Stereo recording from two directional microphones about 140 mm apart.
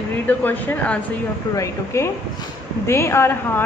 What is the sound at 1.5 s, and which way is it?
A woman's voice, 20° left (ahead or behind).